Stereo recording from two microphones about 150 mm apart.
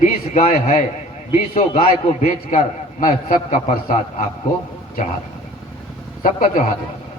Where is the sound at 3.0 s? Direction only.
60° left (ahead or behind).